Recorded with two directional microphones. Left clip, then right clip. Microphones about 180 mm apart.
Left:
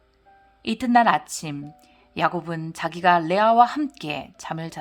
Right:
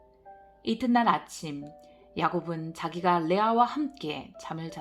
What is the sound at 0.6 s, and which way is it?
Speech, 35° left (ahead or behind).